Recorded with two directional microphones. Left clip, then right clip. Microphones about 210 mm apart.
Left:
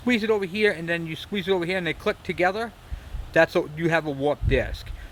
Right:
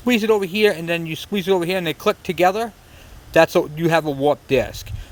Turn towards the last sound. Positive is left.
turn(degrees=-25)  # may be behind; listen again after turning